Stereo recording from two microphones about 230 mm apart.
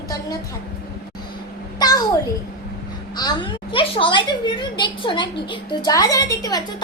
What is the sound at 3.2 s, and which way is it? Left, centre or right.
A woman's voice, centre.